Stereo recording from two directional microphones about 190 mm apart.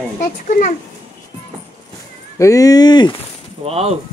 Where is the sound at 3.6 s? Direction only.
30° right (ahead or behind).